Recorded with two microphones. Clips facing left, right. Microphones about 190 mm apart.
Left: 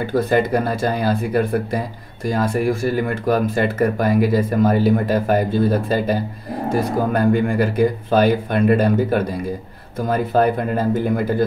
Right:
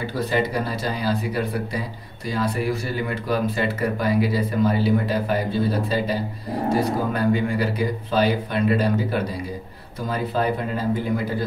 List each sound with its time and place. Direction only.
0.0 s speech: 50° left (ahead or behind)